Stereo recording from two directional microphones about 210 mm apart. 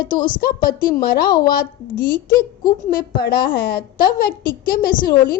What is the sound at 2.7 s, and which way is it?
A woman's voice, 45° left (ahead or behind).